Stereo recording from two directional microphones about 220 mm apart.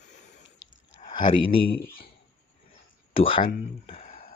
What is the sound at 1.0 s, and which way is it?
Speech, 25° left (ahead or behind).